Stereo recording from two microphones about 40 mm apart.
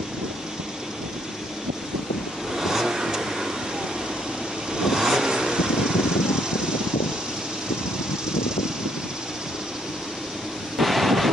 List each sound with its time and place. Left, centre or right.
2.5 s vehicle: centre
4.7 s vehicle: centre
10.8 s a sound: centre